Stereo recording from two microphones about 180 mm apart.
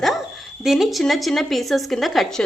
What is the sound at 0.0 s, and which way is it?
Speech, centre (ahead or behind).